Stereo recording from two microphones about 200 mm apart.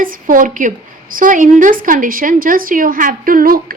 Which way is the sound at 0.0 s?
45° right (ahead or behind).